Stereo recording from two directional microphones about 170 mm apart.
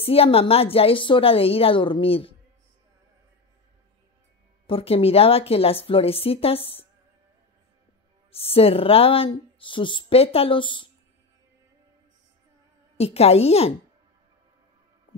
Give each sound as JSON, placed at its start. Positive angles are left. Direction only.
{"t": 0.0, "sound": "speech", "side_deg": 35}
{"t": 4.6, "sound": "speech", "side_deg": 35}
{"t": 8.3, "sound": "speech", "side_deg": 35}
{"t": 12.9, "sound": "speech", "side_deg": 35}